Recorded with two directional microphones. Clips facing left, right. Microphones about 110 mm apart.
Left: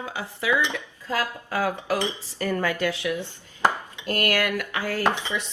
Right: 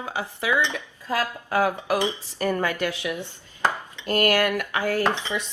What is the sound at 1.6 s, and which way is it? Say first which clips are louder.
Speech: even; 15° right (ahead or behind).